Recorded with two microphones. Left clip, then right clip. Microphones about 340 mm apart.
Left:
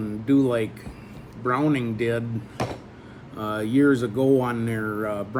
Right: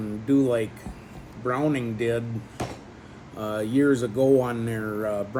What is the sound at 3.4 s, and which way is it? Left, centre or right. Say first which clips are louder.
Speech: left 2 dB; centre.